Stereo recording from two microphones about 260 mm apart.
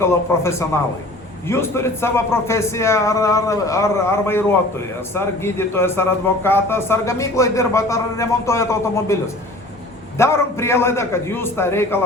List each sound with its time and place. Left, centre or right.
0.0 s a man's voice: centre